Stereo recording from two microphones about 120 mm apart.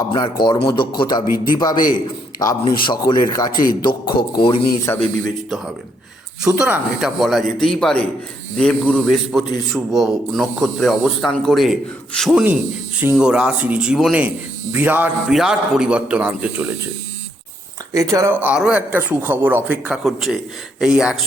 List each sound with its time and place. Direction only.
0.2 s a man's voice: 40° left (ahead or behind)
2.7 s a man's voice: 40° left (ahead or behind)
4.9 s a man's voice: 20° left (ahead or behind)
6.4 s speech: 5° right (ahead or behind)
15.3 s speech: 5° right (ahead or behind)
17.9 s speech: 30° right (ahead or behind)
18.3 s speech: 15° right (ahead or behind)
20.1 s speech: centre (ahead or behind)